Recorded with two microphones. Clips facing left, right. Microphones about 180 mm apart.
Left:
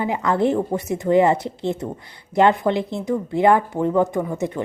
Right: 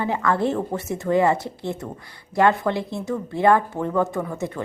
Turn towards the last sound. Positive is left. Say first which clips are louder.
# left 4 dB
turn(degrees=15)  # may be behind; listen again after turning